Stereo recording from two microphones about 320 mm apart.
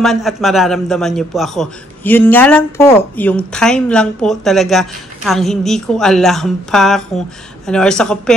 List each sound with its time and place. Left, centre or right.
0.0 s a man's voice: centre